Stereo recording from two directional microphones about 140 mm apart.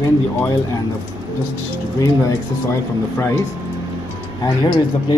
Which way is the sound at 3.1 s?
20° left (ahead or behind).